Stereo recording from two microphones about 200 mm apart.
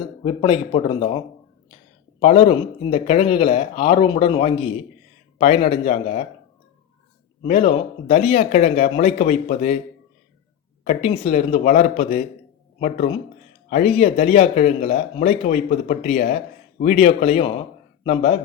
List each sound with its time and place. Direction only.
0.4 s speech: 25° left (ahead or behind)
2.5 s speech: 35° left (ahead or behind)
3.2 s speech: 25° left (ahead or behind)
7.4 s speech: 30° left (ahead or behind)
10.8 s speech: 35° left (ahead or behind)
13.7 s speech: 35° left (ahead or behind)